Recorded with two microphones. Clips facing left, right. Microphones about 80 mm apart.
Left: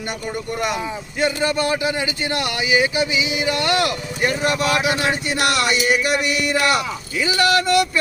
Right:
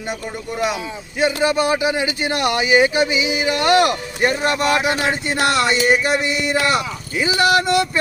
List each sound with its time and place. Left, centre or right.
1.2 s speech: centre